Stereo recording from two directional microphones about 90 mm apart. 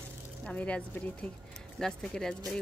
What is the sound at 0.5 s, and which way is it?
A woman's voice, 15° left (ahead or behind).